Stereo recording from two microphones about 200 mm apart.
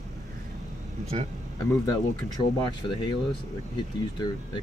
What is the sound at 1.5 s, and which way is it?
Speech, 20° left (ahead or behind).